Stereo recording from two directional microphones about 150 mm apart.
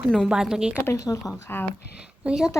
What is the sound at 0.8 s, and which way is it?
Speech, 20° left (ahead or behind).